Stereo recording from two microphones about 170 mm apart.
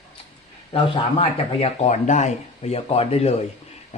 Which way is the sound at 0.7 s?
35° left (ahead or behind).